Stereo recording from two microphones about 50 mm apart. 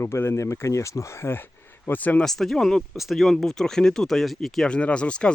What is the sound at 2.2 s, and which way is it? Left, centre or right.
Speech, centre.